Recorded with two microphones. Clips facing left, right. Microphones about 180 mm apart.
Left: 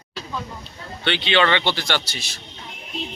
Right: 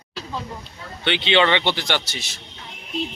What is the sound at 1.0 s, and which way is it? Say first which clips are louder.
Speech: right 1 dB; 20° right (ahead or behind).